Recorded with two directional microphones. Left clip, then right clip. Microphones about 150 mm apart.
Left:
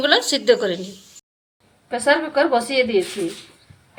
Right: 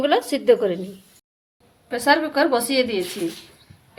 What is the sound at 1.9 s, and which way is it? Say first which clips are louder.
Speech: left 1 dB; 30° right (ahead or behind).